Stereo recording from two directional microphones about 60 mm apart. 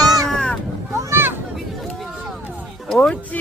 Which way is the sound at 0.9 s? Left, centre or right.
Right.